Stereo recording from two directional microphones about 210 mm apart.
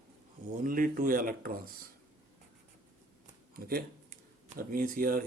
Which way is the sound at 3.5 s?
45° right (ahead or behind).